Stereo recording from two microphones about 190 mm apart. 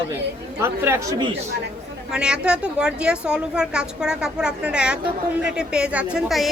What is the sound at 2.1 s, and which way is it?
A woman's voice, 5° right (ahead or behind).